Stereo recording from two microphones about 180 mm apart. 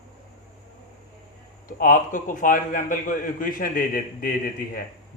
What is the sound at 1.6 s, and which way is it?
A man's voice, 50° left (ahead or behind).